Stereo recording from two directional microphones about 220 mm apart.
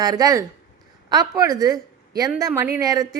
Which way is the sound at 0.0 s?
15° right (ahead or behind).